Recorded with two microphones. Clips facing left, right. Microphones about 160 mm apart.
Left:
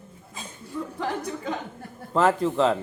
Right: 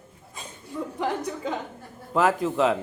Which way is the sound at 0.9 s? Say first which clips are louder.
Right 2 dB; 15° right (ahead or behind).